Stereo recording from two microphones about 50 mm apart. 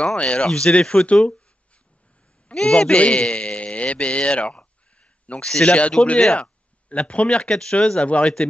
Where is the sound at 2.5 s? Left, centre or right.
Centre.